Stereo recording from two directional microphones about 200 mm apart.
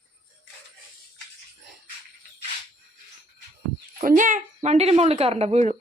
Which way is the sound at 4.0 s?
40° right (ahead or behind).